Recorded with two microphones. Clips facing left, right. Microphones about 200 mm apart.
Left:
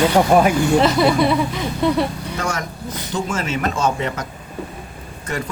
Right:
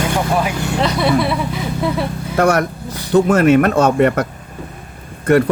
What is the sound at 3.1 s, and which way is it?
Speech, 65° right (ahead or behind).